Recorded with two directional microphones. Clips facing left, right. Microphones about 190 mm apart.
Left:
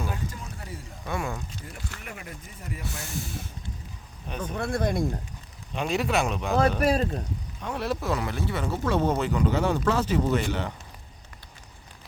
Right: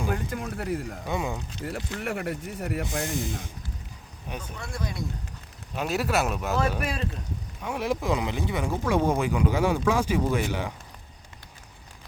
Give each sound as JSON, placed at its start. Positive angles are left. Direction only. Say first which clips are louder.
{"t": 0.1, "sound": "speech", "louder": "right 6 dB", "side_deg": -60}
{"t": 1.0, "sound": "speech", "louder": "left 1 dB", "side_deg": -15}
{"t": 1.6, "sound": "speech", "louder": "right 9 dB", "side_deg": -65}
{"t": 2.8, "sound": "speech", "louder": "right 6 dB", "side_deg": -15}
{"t": 4.5, "sound": "speech", "louder": "left 11 dB", "side_deg": 55}
{"t": 5.7, "sound": "speech", "louder": "even", "side_deg": -5}
{"t": 6.7, "sound": "speech", "louder": "left 7 dB", "side_deg": 40}
{"t": 7.6, "sound": "speech", "louder": "right 2 dB", "side_deg": -10}